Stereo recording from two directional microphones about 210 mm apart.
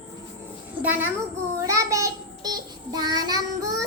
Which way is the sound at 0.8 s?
10° right (ahead or behind).